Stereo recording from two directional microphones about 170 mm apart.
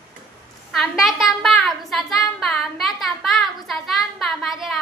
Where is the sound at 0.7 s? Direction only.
Centre (ahead or behind).